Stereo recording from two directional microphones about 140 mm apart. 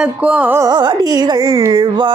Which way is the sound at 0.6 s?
30° right (ahead or behind).